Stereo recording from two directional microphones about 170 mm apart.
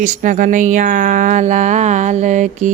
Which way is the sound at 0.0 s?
50° right (ahead or behind).